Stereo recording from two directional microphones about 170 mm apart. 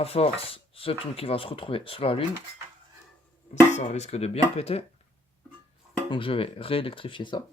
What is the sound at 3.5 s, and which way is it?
Speech, 45° left (ahead or behind).